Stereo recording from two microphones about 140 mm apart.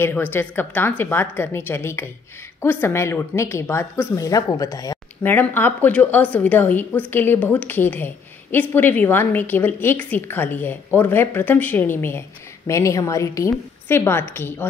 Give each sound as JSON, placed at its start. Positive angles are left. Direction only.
{"t": 0.0, "sound": "a woman's voice", "side_deg": 15}
{"t": 5.2, "sound": "a woman's voice", "side_deg": 15}